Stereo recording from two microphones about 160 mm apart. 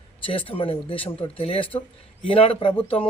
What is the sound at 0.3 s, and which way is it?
Speech, 35° left (ahead or behind).